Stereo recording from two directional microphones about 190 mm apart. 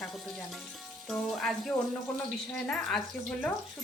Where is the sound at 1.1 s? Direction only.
Centre (ahead or behind).